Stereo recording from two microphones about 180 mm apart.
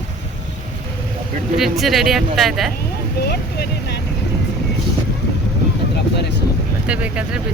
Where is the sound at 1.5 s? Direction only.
Centre (ahead or behind).